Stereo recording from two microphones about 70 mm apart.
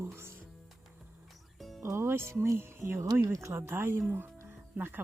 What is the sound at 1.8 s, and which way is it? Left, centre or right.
Speech, right.